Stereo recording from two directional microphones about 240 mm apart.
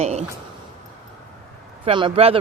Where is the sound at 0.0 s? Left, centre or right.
Right.